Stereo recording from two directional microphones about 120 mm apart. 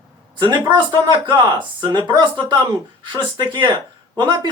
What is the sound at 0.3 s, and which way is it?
A man's voice, 40° right (ahead or behind).